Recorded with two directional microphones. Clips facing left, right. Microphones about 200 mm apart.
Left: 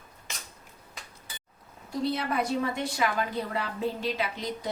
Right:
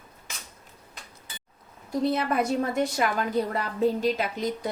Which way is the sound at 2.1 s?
50° right (ahead or behind).